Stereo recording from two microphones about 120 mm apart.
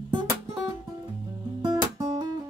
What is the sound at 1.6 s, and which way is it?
Music, 40° right (ahead or behind).